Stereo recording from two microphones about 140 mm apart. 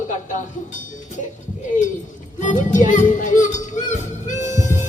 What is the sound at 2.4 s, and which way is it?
Music, 60° left (ahead or behind).